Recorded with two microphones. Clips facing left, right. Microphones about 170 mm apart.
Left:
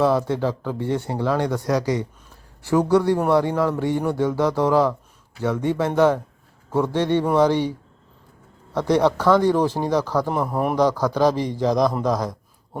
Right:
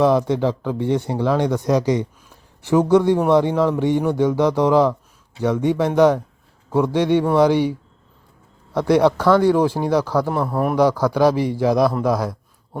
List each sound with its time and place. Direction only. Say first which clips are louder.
0.0 s speech: right 3 dB; 15° right (ahead or behind)
10.2 s a man's voice: right 2 dB; 10° left (ahead or behind)
10.5 s a man's voice: right 2 dB; centre (ahead or behind)
11.0 s speech: right 3 dB; 10° right (ahead or behind)